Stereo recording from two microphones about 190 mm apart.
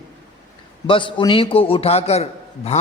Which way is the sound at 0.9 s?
25° left (ahead or behind).